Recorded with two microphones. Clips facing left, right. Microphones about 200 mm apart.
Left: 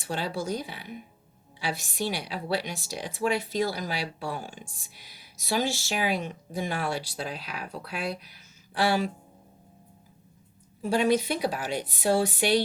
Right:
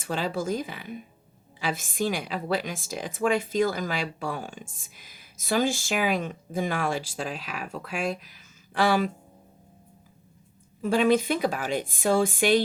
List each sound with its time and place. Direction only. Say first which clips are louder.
0.0 s a woman's voice: right 2 dB; 50° right (ahead or behind)
8.2 s a sound: right 1 dB; 45° right (ahead or behind)
10.8 s a woman's voice: right 2 dB; 50° right (ahead or behind)